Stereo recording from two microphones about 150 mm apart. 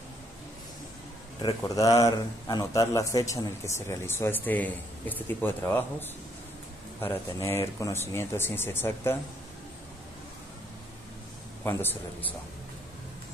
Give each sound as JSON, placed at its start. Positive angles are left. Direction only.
{"t": 1.6, "sound": "a man's voice", "side_deg": 20}
{"t": 11.6, "sound": "speech", "side_deg": 15}